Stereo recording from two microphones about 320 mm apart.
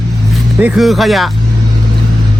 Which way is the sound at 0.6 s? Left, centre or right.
Centre.